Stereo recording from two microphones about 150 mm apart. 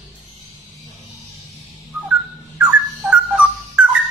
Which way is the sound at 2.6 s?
5° right (ahead or behind).